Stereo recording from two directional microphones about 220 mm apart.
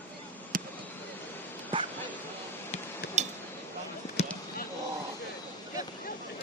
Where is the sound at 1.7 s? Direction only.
25° right (ahead or behind).